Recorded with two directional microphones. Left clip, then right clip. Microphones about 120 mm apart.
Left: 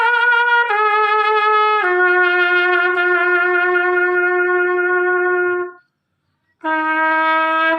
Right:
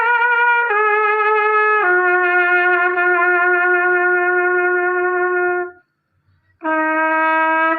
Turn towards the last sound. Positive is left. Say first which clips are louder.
# even
turn(degrees=40)  # may be behind; listen again after turning